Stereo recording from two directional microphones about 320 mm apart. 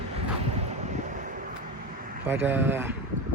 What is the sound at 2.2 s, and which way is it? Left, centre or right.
Speech, centre.